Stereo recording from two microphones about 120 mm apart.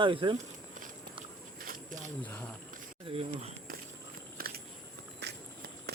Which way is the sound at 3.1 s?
55° right (ahead or behind).